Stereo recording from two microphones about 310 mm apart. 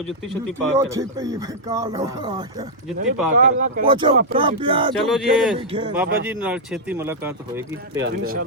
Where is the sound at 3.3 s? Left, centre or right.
Right.